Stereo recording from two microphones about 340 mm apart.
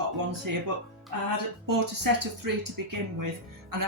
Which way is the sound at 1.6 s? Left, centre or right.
Right.